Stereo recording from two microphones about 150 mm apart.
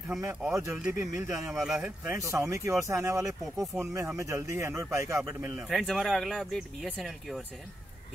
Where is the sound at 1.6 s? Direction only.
5° right (ahead or behind).